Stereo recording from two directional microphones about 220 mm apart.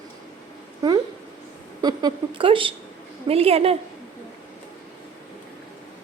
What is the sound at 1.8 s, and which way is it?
A woman's voice, 20° right (ahead or behind).